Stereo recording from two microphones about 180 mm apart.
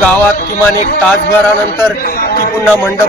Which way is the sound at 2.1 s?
55° left (ahead or behind).